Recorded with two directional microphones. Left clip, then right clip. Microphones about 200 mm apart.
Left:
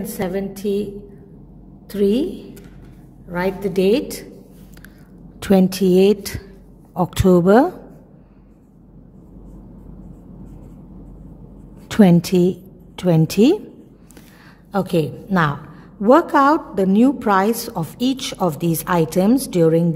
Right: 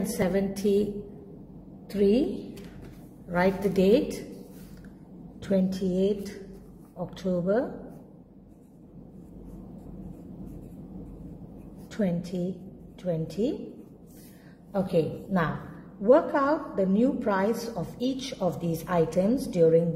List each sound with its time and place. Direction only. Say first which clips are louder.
0.2 s a woman's voice: left 3 dB; 15° left (ahead or behind)
1.9 s a woman's voice: left 5 dB; 30° left (ahead or behind)
3.3 s a woman's voice: left 3 dB; 15° left (ahead or behind)
5.4 s a woman's voice: left 11 dB; 45° left (ahead or behind)
11.9 s a woman's voice: left 15 dB; 50° left (ahead or behind)
14.7 s a woman's voice: left 6 dB; 40° left (ahead or behind)